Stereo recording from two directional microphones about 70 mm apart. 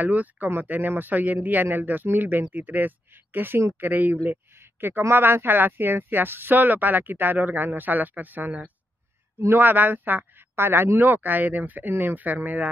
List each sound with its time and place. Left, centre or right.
0.0 s speech: right